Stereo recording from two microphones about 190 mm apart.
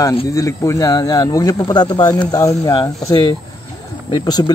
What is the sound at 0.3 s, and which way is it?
A man's voice, 15° left (ahead or behind).